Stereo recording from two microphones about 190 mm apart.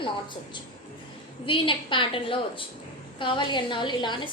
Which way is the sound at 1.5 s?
25° left (ahead or behind).